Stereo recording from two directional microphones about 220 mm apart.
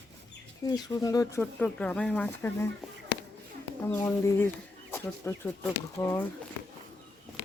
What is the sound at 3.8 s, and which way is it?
Speech, 10° left (ahead or behind).